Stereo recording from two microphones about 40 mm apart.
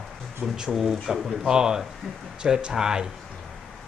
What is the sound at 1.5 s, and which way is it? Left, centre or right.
Speech, centre.